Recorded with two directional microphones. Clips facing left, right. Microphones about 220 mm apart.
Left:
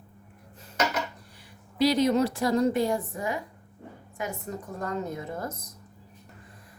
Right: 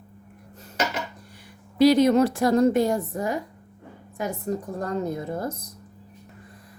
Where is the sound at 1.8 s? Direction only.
55° right (ahead or behind); by 4.9 s 35° right (ahead or behind).